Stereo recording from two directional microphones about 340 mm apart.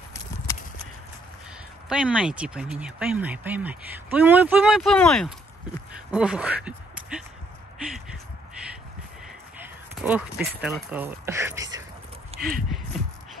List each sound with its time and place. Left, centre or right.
1.9 s speech: centre
10.0 s speech: centre
12.4 s speech: right